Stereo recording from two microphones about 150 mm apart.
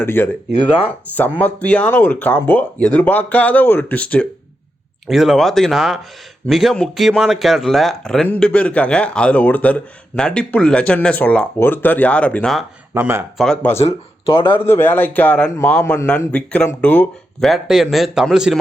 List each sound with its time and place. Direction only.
0.0 s a man's voice: 15° left (ahead or behind)
1.4 s a man's voice: 10° left (ahead or behind)
12.9 s speech: 15° right (ahead or behind)
13.3 s speech: 5° left (ahead or behind)
13.7 s speech: 40° left (ahead or behind)
14.6 s a man's voice: 15° left (ahead or behind)
17.5 s speech: centre (ahead or behind)